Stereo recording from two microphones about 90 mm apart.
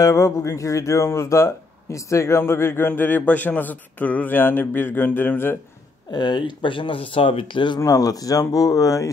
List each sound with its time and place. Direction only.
0.0 s speech: 35° left (ahead or behind)
6.1 s speech: 60° left (ahead or behind)
7.8 s speech: 40° left (ahead or behind)